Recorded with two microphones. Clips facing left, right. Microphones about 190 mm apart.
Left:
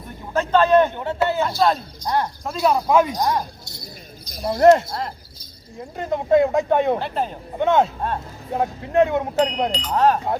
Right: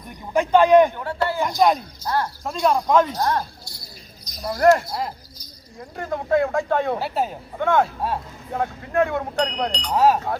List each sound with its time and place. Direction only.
0.3 s a man's voice: 15° right (ahead or behind)
0.9 s speech: 20° left (ahead or behind)
1.4 s a man's voice: 15° right (ahead or behind)
2.0 s speech: 15° left (ahead or behind)
2.4 s speech: centre (ahead or behind); by 4.8 s 25° left (ahead or behind)
6.0 s speech: 20° left (ahead or behind)
7.0 s speech: 5° right (ahead or behind)
7.6 s speech: 20° left (ahead or behind)
9.5 s speech: 5° left (ahead or behind)
9.9 s a man's voice: 10° right (ahead or behind)